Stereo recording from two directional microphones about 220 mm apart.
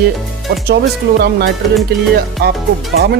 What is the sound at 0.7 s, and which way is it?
Speech, 50° right (ahead or behind).